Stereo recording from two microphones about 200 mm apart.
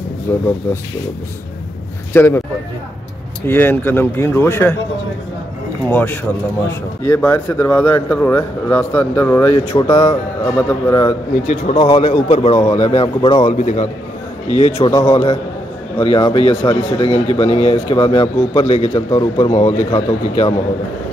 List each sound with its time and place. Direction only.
0.3 s a man's voice: 15° left (ahead or behind)
2.1 s a man's voice: 10° left (ahead or behind)
3.4 s a man's voice: 10° left (ahead or behind)
5.9 s a man's voice: 10° left (ahead or behind)
11.6 s a man's voice: 25° left (ahead or behind)
13.5 s a man's voice: 40° left (ahead or behind)
14.5 s a man's voice: 30° left (ahead or behind)